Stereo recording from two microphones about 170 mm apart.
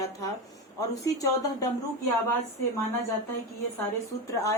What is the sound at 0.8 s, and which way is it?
Speech, 20° left (ahead or behind).